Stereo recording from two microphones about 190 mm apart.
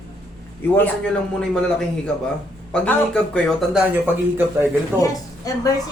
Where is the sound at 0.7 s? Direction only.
5° left (ahead or behind).